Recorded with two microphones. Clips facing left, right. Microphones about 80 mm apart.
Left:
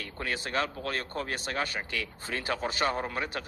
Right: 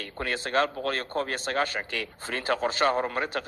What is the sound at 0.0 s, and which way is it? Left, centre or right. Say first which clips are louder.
A man's voice: right 3 dB; right.